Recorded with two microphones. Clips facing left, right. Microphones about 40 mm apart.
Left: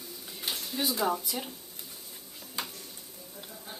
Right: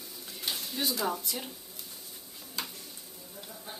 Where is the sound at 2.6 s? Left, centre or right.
Centre.